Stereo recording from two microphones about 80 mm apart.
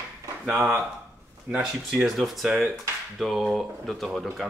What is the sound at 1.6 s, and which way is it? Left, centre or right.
Speech, centre.